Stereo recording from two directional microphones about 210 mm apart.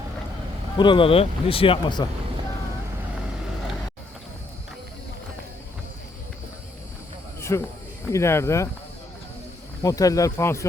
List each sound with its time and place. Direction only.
0.8 s speech: 25° left (ahead or behind)
7.5 s speech: 15° left (ahead or behind)
9.8 s speech: 15° left (ahead or behind)